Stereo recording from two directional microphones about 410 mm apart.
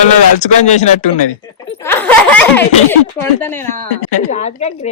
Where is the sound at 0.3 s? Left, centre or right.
Centre.